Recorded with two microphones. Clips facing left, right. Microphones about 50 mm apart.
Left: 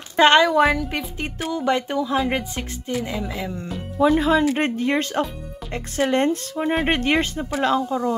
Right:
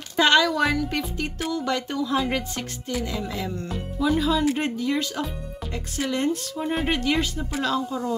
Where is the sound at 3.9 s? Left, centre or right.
Left.